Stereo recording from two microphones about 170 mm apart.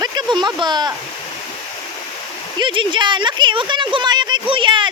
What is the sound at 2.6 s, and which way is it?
A woman's voice, 30° right (ahead or behind).